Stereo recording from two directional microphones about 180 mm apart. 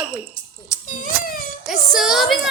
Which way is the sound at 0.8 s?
50° left (ahead or behind).